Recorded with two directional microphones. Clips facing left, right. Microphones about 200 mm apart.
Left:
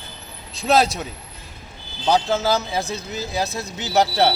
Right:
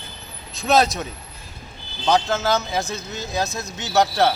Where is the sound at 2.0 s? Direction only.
10° left (ahead or behind).